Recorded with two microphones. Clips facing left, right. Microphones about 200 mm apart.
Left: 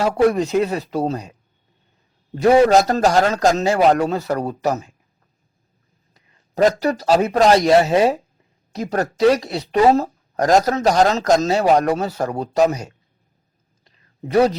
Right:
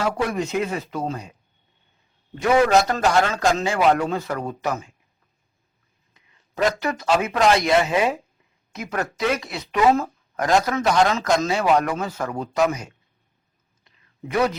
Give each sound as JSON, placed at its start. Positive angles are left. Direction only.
{"t": 0.0, "sound": "a woman's voice", "side_deg": 35}
{"t": 2.3, "sound": "a woman's voice", "side_deg": 35}
{"t": 6.1, "sound": "a man's voice", "side_deg": 40}
{"t": 13.8, "sound": "whispering", "side_deg": 40}